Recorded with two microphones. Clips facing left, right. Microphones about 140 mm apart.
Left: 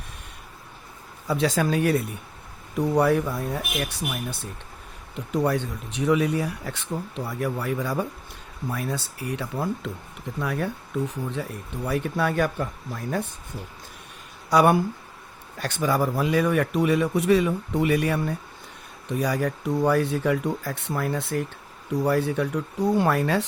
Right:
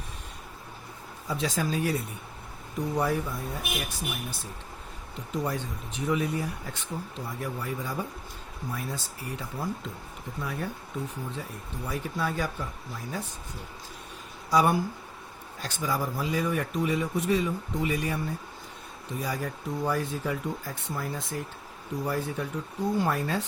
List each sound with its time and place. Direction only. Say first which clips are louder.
1.3 s a man's voice: left 6 dB; 70° left (ahead or behind)
7.3 s a man's voice: left 7 dB; 70° left (ahead or behind)
11.9 s speech: left 6 dB; 65° left (ahead or behind)
14.5 s a man's voice: left 5 dB; 70° left (ahead or behind)